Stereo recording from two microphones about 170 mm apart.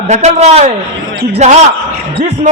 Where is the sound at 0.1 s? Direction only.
40° right (ahead or behind).